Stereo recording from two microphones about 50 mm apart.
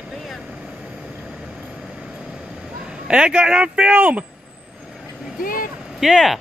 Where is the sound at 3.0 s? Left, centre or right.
Centre.